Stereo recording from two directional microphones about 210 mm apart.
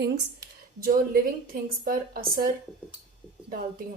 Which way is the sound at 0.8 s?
40° right (ahead or behind).